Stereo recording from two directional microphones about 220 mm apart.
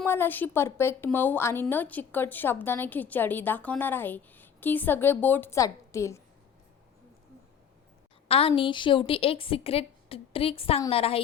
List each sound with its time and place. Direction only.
0.0 s a woman's voice: 10° left (ahead or behind)
8.3 s a woman's voice: 25° left (ahead or behind)